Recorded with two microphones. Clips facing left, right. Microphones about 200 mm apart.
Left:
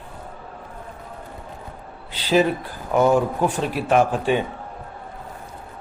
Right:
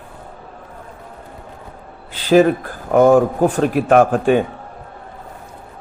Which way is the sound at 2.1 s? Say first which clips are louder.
Right 7 dB; 50° right (ahead or behind).